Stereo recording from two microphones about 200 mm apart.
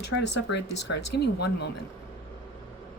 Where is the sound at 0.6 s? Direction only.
60° left (ahead or behind).